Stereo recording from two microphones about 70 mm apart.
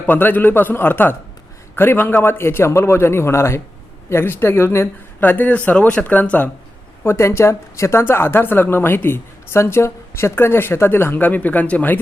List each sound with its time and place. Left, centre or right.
0.1 s a woman's voice: left
5.2 s speech: left
7.0 s a woman's voice: left